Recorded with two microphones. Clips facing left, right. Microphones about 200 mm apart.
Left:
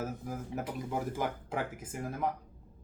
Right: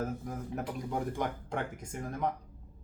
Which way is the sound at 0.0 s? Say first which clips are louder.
Right 1 dB; 5° left (ahead or behind).